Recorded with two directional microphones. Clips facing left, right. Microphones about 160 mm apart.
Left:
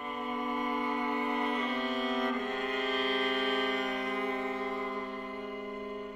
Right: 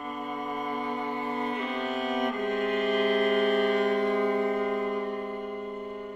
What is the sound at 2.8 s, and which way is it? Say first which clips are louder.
Music: right 8 dB; 50° right (ahead or behind).